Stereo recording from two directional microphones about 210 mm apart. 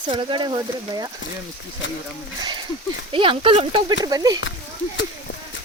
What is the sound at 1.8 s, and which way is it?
Speech, 65° left (ahead or behind).